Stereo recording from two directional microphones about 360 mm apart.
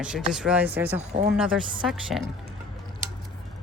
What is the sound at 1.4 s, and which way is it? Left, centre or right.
Speech, centre.